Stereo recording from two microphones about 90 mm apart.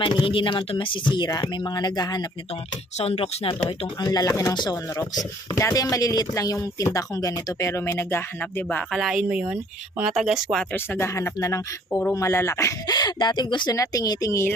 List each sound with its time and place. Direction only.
0.0 s speech: 65° left (ahead or behind)
3.1 s speech: 85° left
4.0 s speech: 45° left (ahead or behind); by 8.8 s 20° left (ahead or behind)
8.9 s speech: centre (ahead or behind)
9.3 s speech: 15° right (ahead or behind)
10.8 s speech: 30° left (ahead or behind)
12.9 s speech: 50° left (ahead or behind)
13.7 s speech: 40° left (ahead or behind)